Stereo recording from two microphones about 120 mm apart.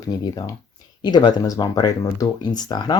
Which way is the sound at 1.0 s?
35° left (ahead or behind).